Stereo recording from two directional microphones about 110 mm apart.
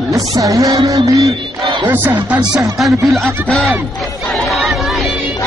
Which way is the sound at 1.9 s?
20° right (ahead or behind).